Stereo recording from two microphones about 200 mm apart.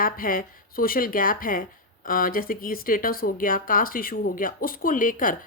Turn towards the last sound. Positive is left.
turn(degrees=45)  # may be behind; listen again after turning